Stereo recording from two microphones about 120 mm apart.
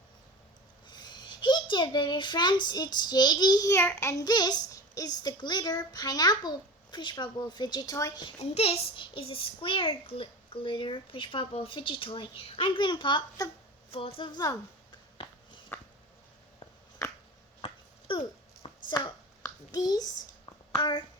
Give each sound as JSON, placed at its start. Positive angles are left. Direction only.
{"t": 0.9, "sound": "a child's voice", "side_deg": 35}
{"t": 4.3, "sound": "a child's voice", "side_deg": 35}
{"t": 8.4, "sound": "a child's voice", "side_deg": 60}
{"t": 13.9, "sound": "a child's voice", "side_deg": 50}
{"t": 15.7, "sound": "a sound", "side_deg": 20}
{"t": 18.1, "sound": "a sound", "side_deg": 40}
{"t": 18.9, "sound": "a child's voice", "side_deg": 35}